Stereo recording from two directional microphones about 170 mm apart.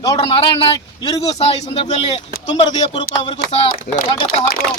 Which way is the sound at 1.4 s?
35° left (ahead or behind).